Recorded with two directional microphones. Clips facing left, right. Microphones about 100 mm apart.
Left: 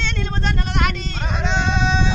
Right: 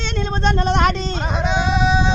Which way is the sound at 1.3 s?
10° right (ahead or behind).